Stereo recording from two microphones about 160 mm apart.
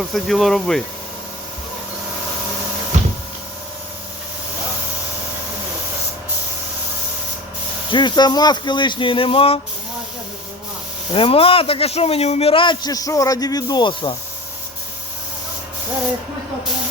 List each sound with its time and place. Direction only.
0.1 s speech: centre (ahead or behind)
7.9 s speech: 30° left (ahead or behind)
11.1 s a man's voice: 35° left (ahead or behind)